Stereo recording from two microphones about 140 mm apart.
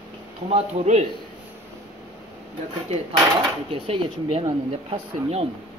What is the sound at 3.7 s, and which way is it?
Speech, 40° right (ahead or behind).